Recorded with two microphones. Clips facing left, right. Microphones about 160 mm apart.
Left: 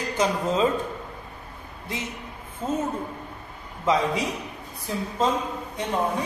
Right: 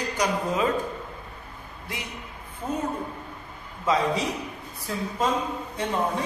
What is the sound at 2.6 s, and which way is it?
Speech, 20° left (ahead or behind).